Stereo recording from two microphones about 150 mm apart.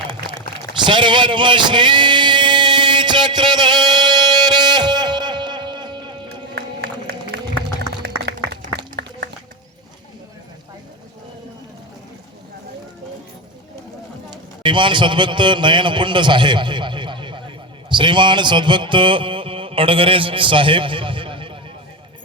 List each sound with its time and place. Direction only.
0.8 s a sound: 30° right (ahead or behind)
7.8 s music: 90° right
14.3 s a man's voice: 30° right (ahead or behind)